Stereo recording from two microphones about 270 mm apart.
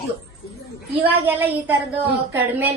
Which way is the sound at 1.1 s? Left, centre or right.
Centre.